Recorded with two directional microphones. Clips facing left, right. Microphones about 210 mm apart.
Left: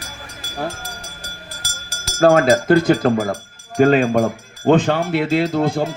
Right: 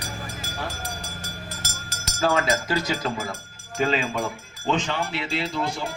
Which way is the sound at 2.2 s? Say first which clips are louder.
Left 10 dB; 50° left (ahead or behind).